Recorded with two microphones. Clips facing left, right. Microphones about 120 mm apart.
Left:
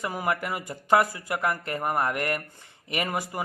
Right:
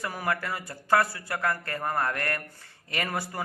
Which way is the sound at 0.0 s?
20° left (ahead or behind).